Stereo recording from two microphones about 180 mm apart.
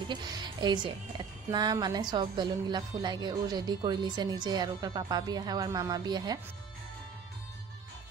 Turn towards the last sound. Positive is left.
turn(degrees=-20)  # may be behind; listen again after turning